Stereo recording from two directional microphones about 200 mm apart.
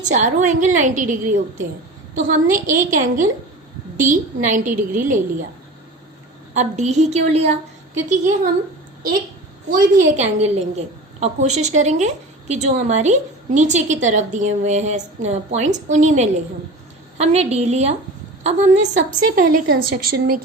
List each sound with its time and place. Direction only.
0.1 s a woman's voice: 40° right (ahead or behind)
6.5 s a woman's voice: 35° right (ahead or behind)
10.2 s a woman's voice: 35° right (ahead or behind); by 20.4 s 50° right (ahead or behind)